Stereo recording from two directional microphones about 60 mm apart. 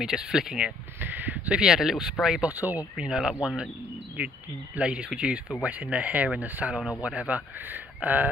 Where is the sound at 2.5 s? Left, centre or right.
Right.